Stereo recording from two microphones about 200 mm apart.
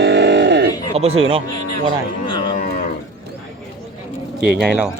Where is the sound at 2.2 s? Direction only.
25° left (ahead or behind).